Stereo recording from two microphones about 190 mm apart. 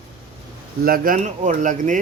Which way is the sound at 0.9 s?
50° right (ahead or behind).